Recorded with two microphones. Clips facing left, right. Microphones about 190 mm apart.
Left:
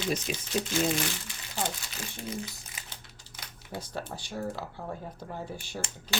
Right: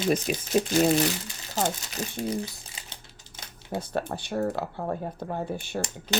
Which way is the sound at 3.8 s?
60° right (ahead or behind).